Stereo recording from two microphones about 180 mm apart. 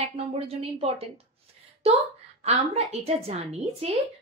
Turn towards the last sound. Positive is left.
turn(degrees=-35)  # may be behind; listen again after turning